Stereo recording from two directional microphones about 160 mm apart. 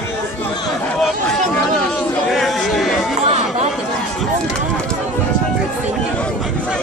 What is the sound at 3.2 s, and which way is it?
Chatter, 40° right (ahead or behind).